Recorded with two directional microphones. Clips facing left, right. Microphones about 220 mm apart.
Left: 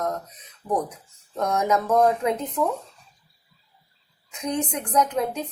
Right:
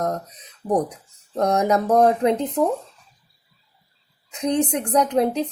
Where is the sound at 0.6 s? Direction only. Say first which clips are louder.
Right 4 dB; 30° right (ahead or behind).